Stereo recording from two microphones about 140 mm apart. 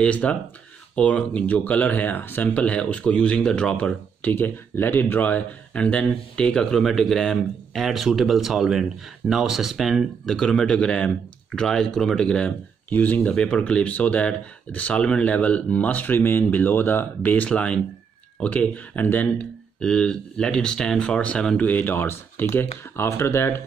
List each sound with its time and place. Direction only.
0.0 s speech: 10° left (ahead or behind)